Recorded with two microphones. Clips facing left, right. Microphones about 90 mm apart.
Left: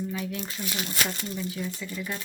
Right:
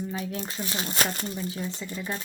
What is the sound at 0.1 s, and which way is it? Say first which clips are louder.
Speech: even; 35° right (ahead or behind).